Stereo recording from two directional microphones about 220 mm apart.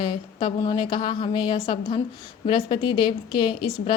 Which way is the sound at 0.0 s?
20° left (ahead or behind).